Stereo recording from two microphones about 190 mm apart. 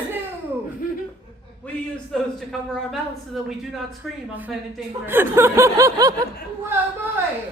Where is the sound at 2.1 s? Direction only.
Centre (ahead or behind).